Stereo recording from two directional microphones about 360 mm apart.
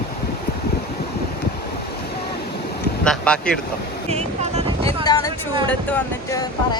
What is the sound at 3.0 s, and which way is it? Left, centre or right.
Speech, centre.